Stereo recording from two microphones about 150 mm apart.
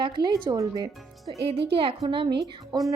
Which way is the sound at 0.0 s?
30° right (ahead or behind).